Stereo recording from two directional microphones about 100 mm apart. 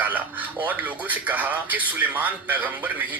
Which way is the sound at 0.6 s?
15° right (ahead or behind).